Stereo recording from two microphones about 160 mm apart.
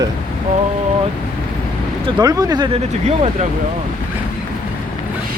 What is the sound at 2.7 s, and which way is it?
Speech, 40° right (ahead or behind).